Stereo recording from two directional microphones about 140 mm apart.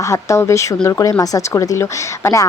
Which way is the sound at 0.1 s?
20° left (ahead or behind).